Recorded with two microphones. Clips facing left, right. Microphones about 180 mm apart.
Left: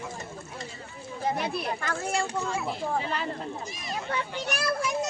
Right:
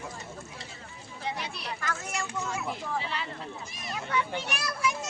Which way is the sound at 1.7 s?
30° left (ahead or behind).